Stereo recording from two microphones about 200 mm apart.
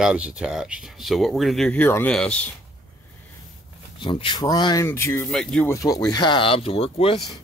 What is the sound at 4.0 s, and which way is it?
Speech, 25° left (ahead or behind).